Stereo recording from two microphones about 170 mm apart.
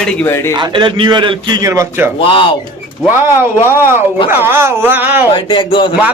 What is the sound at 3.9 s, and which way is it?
Speech, 15° right (ahead or behind).